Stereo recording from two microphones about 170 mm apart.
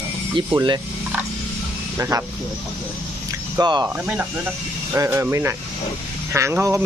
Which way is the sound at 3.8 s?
10° right (ahead or behind).